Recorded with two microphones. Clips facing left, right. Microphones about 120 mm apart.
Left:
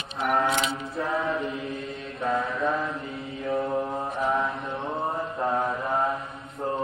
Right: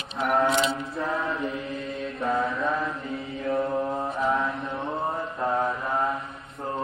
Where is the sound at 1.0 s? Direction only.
Centre (ahead or behind).